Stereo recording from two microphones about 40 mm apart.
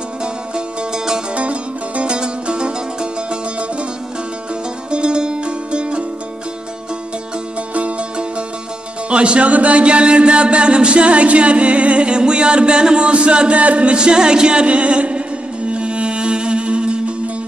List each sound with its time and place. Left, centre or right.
0.2 s music: right
4.9 s music: right
7.7 s music: right
9.1 s a sound: right
14.7 s a sound: right
15.7 s music: right